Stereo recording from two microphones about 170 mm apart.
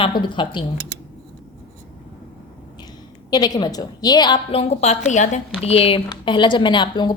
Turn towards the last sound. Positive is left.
turn(degrees=25)  # may be behind; listen again after turning